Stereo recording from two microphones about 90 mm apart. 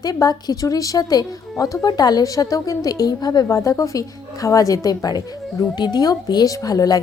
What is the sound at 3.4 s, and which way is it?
Speech, 35° left (ahead or behind).